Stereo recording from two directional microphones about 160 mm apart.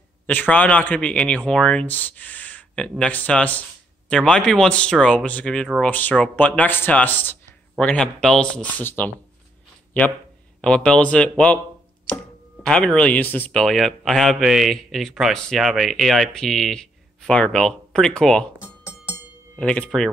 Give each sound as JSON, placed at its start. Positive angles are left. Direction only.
{"t": 0.3, "sound": "speech", "side_deg": 10}
{"t": 10.6, "sound": "speech", "side_deg": 5}
{"t": 18.6, "sound": "music", "side_deg": 25}
{"t": 19.5, "sound": "speech", "side_deg": 10}